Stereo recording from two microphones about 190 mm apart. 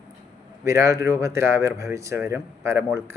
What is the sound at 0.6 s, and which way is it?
Speech, 15° right (ahead or behind).